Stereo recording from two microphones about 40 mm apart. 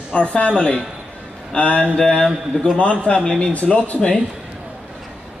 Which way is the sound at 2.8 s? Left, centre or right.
Left.